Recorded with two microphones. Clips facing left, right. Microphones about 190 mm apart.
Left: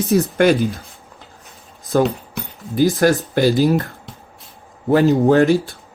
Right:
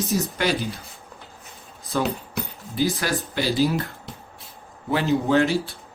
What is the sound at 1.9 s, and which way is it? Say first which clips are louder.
Speech: left 7 dB; 50° left (ahead or behind).